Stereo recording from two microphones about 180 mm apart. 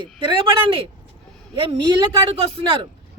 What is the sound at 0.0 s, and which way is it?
Speech, 25° right (ahead or behind).